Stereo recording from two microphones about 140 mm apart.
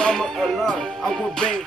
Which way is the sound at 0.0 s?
5° left (ahead or behind).